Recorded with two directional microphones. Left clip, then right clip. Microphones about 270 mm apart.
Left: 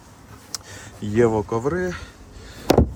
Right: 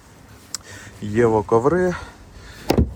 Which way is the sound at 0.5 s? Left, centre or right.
Left.